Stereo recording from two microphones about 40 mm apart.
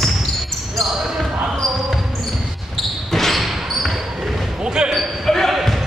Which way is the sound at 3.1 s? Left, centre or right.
Centre.